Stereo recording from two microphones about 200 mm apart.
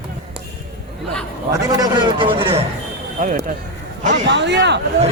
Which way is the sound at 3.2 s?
45° right (ahead or behind).